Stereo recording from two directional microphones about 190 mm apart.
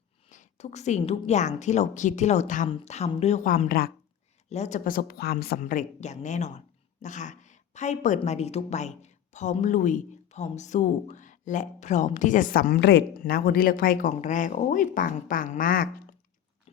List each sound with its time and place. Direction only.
0.3 s a woman's voice: 40° left (ahead or behind)
4.4 s a woman's voice: 35° left (ahead or behind)